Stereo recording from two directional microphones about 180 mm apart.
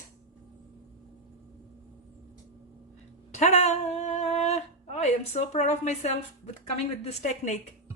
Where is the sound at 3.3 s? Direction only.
40° left (ahead or behind).